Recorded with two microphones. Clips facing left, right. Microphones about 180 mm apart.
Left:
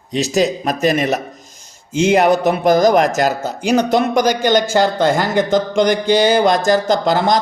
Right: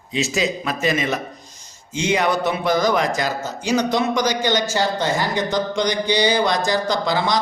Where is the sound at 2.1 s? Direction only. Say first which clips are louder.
Left 6 dB; 40° left (ahead or behind).